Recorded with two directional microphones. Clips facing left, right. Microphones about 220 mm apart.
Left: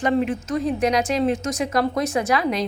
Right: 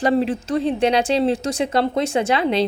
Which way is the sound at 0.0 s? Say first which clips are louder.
Right 2 dB; 35° right (ahead or behind).